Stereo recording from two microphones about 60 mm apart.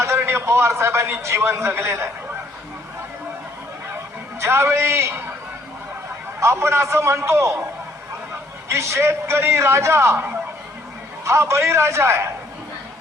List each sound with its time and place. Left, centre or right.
0.0 s a man's voice: right
3.9 s a man's voice: right
6.4 s a man's voice: right
8.7 s a man's voice: right
11.3 s a man's voice: right